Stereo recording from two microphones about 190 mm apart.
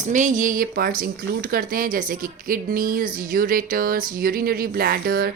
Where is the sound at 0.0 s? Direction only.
40° right (ahead or behind).